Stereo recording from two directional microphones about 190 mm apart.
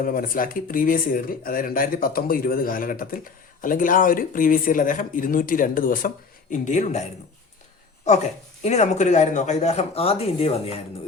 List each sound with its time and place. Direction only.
0.0 s speech: 50° left (ahead or behind)
8.6 s speech: 35° left (ahead or behind)